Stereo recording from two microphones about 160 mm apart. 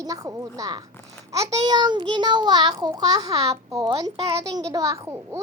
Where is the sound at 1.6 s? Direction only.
25° right (ahead or behind).